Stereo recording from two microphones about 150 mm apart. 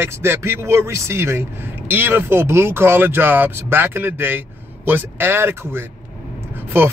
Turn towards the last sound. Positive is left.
turn(degrees=-15)  # may be behind; listen again after turning